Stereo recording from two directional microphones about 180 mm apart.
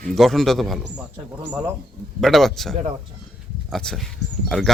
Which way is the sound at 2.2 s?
Centre (ahead or behind).